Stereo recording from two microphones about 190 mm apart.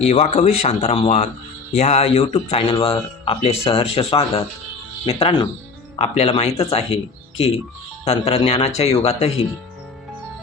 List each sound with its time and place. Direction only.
0.0 s speech: 35° left (ahead or behind)